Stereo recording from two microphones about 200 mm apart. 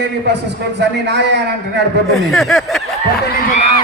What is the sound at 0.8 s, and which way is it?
Speech, 60° right (ahead or behind).